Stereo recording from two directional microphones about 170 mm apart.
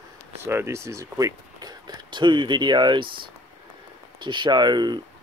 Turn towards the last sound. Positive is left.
turn(degrees=-25)  # may be behind; listen again after turning